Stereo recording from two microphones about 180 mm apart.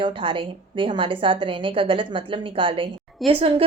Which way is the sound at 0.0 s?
30° right (ahead or behind).